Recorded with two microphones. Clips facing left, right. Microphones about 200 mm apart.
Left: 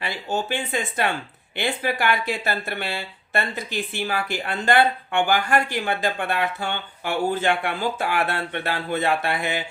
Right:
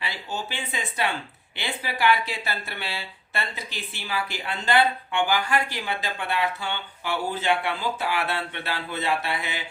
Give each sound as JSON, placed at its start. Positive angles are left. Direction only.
{"t": 0.0, "sound": "speech", "side_deg": 50}